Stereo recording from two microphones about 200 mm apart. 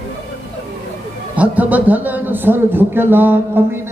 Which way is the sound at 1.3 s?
5° right (ahead or behind).